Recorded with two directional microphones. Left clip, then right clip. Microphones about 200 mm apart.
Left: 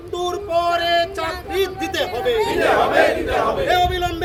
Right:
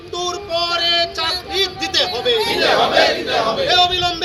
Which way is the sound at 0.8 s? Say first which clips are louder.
Right 1 dB; 45° left (ahead or behind).